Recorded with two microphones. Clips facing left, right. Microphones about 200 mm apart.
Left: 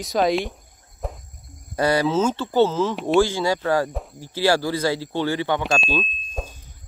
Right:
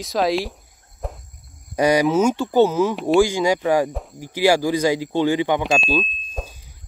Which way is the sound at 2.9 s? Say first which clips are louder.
Right 2 dB; centre (ahead or behind).